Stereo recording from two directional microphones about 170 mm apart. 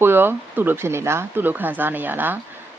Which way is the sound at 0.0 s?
10° right (ahead or behind).